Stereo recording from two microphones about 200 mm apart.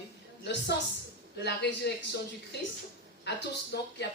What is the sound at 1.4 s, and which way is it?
Speech, 55° left (ahead or behind).